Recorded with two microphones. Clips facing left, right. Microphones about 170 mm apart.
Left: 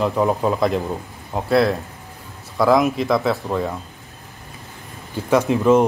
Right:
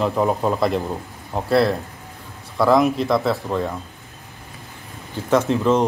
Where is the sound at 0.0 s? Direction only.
Centre (ahead or behind).